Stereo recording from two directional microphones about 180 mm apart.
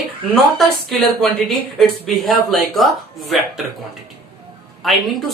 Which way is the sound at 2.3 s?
Centre (ahead or behind).